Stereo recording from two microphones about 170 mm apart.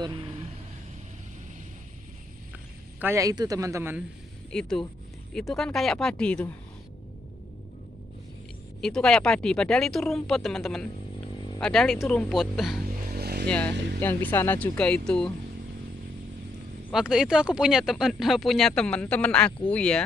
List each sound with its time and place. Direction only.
3.0 s a man's voice: 15° right (ahead or behind)
4.5 s speech: 5° left (ahead or behind)
8.8 s speech: 5° left (ahead or behind)
13.1 s vehicle: 70° right (ahead or behind)
13.5 s speech: 5° left (ahead or behind)
16.9 s speech: 5° right (ahead or behind)